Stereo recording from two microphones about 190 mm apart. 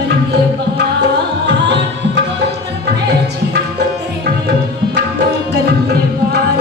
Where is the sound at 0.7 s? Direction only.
65° right (ahead or behind).